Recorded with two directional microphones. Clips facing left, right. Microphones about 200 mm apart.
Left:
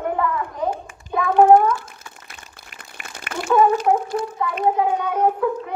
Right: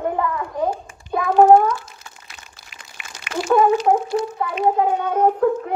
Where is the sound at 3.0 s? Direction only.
50° left (ahead or behind).